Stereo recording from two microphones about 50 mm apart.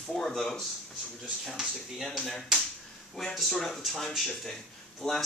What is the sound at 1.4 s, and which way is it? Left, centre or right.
Speech, centre.